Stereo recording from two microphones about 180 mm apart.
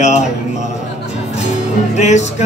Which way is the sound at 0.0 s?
40° left (ahead or behind).